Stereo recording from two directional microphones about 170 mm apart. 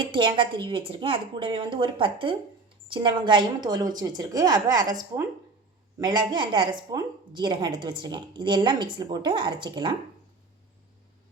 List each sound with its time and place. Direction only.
0.0 s a woman's voice: 30° right (ahead or behind)
6.0 s a woman's voice: 25° right (ahead or behind)